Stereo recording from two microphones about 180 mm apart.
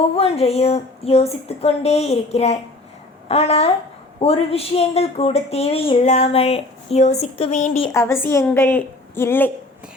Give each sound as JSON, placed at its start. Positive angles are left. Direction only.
{"t": 0.2, "sound": "a woman's voice", "side_deg": 35}
{"t": 7.9, "sound": "a woman's voice", "side_deg": 15}